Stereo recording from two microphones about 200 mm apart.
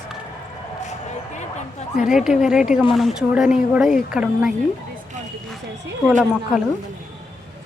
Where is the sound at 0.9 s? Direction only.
35° left (ahead or behind).